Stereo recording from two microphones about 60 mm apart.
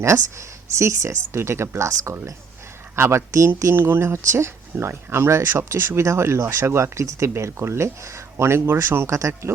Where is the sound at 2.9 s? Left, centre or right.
Right.